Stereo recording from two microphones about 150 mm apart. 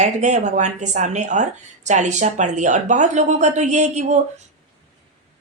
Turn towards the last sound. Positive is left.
turn(degrees=-50)  # may be behind; listen again after turning